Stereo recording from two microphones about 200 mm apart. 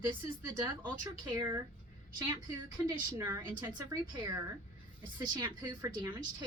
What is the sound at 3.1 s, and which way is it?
A woman's voice, 15° right (ahead or behind).